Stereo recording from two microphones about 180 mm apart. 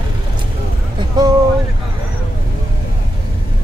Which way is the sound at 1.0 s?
20° right (ahead or behind).